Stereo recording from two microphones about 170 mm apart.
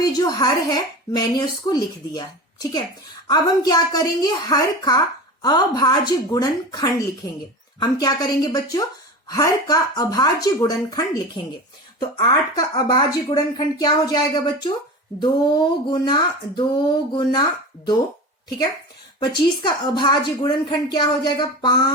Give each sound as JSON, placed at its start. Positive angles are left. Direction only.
{"t": 0.0, "sound": "speech", "side_deg": 20}
{"t": 19.2, "sound": "speech", "side_deg": 25}